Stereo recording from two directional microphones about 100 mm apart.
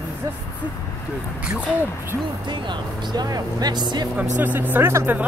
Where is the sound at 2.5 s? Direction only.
45° right (ahead or behind).